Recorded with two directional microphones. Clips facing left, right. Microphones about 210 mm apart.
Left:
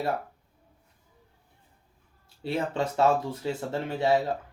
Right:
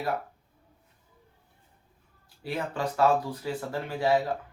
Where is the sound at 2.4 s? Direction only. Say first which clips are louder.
Left 3 dB; 25° left (ahead or behind).